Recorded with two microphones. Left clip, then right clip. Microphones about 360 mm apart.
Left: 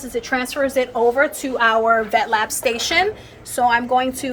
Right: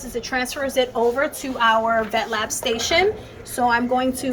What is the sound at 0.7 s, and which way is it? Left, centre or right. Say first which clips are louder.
A woman's voice: left 1 dB; centre.